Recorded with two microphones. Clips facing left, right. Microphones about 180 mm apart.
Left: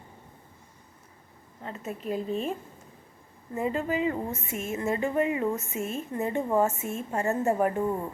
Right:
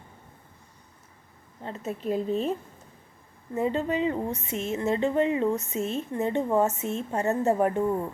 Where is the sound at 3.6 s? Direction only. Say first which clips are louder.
Right 2 dB; 30° right (ahead or behind).